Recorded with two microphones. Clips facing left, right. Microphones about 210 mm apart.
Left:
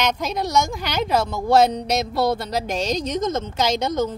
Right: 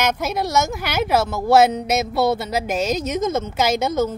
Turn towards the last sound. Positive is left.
turn(degrees=-5)  # may be behind; listen again after turning